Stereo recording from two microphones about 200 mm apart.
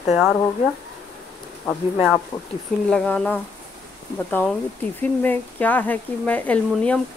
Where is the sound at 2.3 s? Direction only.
20° left (ahead or behind).